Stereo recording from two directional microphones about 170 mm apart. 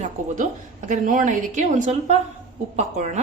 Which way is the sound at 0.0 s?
45° right (ahead or behind).